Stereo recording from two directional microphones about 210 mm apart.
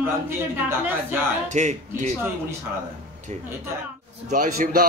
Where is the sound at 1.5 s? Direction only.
35° right (ahead or behind).